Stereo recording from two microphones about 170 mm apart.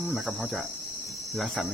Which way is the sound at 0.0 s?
Centre (ahead or behind).